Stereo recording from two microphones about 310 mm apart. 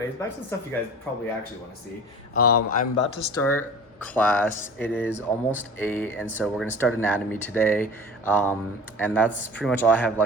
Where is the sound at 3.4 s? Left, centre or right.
Centre.